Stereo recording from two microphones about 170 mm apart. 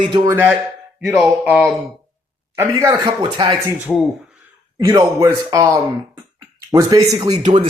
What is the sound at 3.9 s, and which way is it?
Speech, 10° left (ahead or behind).